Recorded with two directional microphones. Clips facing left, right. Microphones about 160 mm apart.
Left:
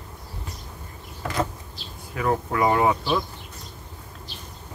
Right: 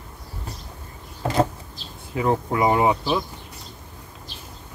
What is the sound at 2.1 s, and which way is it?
Speech, 20° right (ahead or behind).